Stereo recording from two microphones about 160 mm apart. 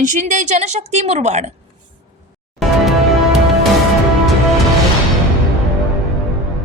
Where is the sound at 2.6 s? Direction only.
Centre (ahead or behind).